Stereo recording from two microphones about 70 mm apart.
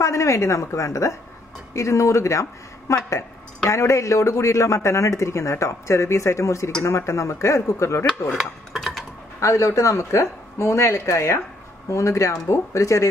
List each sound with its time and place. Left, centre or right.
0.0 s a man's voice: left
8.3 s dishes: centre
9.4 s a man's voice: left